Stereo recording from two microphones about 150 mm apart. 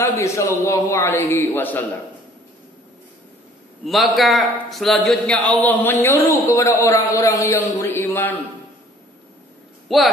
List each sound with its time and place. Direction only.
0.0 s a man's voice: 20° left (ahead or behind)
3.8 s a man's voice: centre (ahead or behind)
9.8 s speech: centre (ahead or behind)